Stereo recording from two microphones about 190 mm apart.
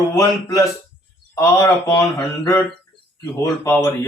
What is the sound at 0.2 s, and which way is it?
Speech, 15° left (ahead or behind).